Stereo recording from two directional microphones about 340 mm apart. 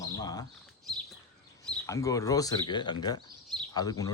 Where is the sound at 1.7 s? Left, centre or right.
Centre.